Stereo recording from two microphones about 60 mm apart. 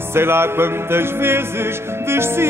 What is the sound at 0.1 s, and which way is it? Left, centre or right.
Music, right.